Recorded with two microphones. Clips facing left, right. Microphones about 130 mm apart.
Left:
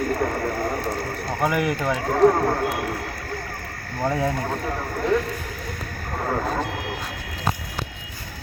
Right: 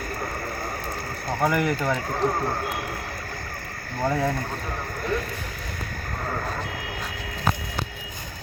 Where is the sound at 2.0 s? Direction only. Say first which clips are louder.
Left 8 dB; 70° left (ahead or behind).